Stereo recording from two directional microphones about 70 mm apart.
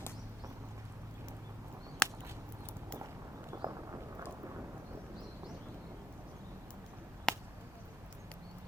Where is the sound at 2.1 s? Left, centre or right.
Right.